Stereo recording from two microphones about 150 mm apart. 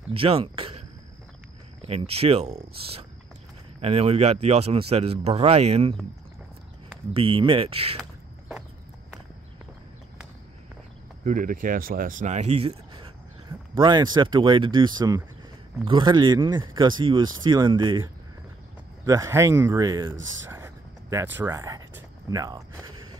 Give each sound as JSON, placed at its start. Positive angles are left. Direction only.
{"t": 0.1, "sound": "speech", "side_deg": -40}
{"t": 7.2, "sound": "speech", "side_deg": -35}
{"t": 11.2, "sound": "speech", "side_deg": -65}
{"t": 19.0, "sound": "speech", "side_deg": -20}